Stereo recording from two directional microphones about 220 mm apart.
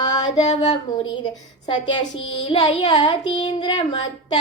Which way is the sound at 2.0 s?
55° left (ahead or behind).